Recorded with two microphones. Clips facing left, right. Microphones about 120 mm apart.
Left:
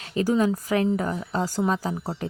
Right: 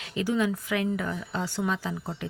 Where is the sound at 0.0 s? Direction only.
40° left (ahead or behind).